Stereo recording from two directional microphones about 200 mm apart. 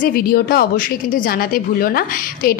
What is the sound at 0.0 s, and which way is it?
A woman's voice, 50° left (ahead or behind).